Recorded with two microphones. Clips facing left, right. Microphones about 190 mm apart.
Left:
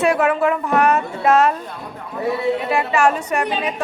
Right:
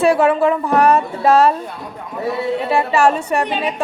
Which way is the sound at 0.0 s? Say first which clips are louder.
Right 3 dB; 30° right (ahead or behind).